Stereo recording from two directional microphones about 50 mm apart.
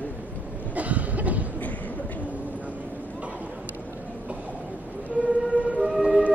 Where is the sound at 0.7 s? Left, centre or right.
Right.